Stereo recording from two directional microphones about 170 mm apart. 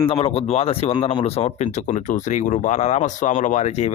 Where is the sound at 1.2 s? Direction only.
40° left (ahead or behind).